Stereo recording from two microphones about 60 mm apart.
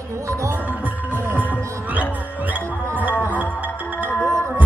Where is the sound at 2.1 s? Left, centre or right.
Right.